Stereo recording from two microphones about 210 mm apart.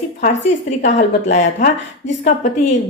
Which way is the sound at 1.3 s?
35° left (ahead or behind).